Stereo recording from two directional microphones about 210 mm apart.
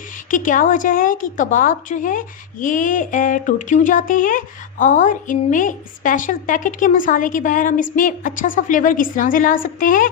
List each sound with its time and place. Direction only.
0.3 s a woman's voice: 40° left (ahead or behind)